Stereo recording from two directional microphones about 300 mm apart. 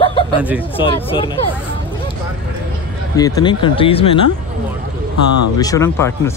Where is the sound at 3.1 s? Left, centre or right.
Centre.